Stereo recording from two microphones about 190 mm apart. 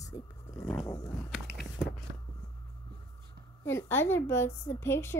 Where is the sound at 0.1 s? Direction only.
20° left (ahead or behind).